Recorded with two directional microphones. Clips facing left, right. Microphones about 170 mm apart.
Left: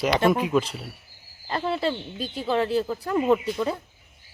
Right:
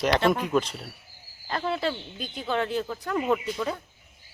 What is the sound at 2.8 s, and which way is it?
Speech, 10° left (ahead or behind).